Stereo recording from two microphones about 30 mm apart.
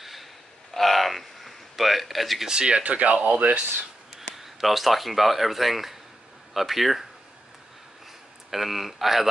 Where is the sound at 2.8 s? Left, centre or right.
Right.